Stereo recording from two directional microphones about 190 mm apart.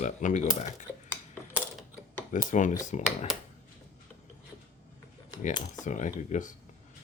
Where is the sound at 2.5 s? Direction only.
40° left (ahead or behind).